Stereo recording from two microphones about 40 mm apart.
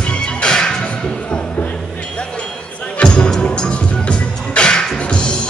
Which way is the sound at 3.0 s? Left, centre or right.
Left.